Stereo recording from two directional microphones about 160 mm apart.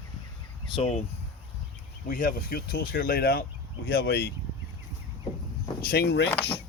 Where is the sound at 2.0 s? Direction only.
60° left (ahead or behind).